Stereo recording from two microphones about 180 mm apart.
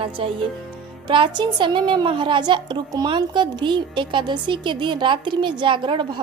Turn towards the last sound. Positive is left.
turn(degrees=-25)  # may be behind; listen again after turning